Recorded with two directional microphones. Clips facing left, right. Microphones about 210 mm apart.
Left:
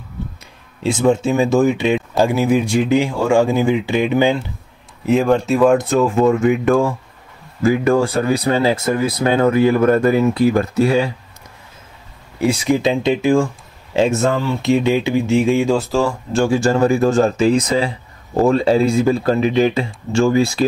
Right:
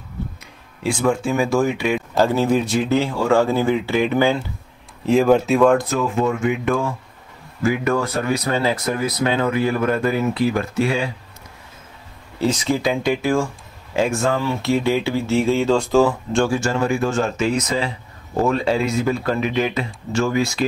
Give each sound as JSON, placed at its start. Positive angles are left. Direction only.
{"t": 0.8, "sound": "speech", "side_deg": 20}
{"t": 5.0, "sound": "speech", "side_deg": 0}
{"t": 6.1, "sound": "speech", "side_deg": 45}
{"t": 9.2, "sound": "speech", "side_deg": 45}
{"t": 12.4, "sound": "speech", "side_deg": 15}
{"t": 16.4, "sound": "speech", "side_deg": 35}